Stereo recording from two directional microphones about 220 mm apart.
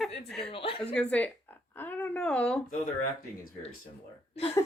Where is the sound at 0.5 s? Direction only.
25° left (ahead or behind).